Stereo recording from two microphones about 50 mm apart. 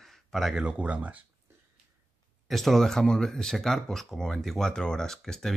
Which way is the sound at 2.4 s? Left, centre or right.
Centre.